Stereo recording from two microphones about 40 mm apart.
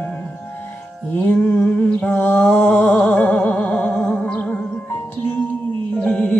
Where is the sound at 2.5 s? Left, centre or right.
Left.